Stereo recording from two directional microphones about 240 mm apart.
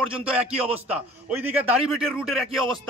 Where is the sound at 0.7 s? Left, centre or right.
Centre.